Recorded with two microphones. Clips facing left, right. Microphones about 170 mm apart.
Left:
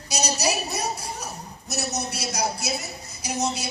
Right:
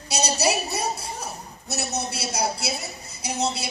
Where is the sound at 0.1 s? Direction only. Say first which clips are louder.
Right 2 dB; 30° right (ahead or behind).